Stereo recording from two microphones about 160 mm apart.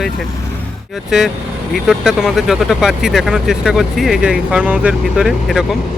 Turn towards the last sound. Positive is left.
turn(degrees=0)  # may be behind; listen again after turning